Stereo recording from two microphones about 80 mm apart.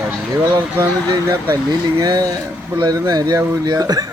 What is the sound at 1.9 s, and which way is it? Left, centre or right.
A man's voice, right.